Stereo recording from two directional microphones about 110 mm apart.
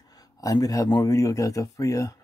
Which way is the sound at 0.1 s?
35° left (ahead or behind).